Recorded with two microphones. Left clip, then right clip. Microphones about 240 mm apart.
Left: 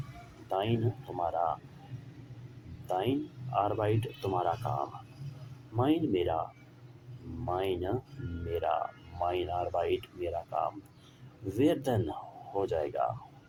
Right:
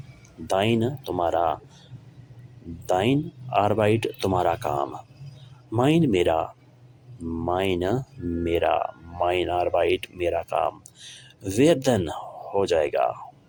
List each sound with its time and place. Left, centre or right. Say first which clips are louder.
0.4 s speech: right 9 dB; right
2.8 s speech: right 9 dB; right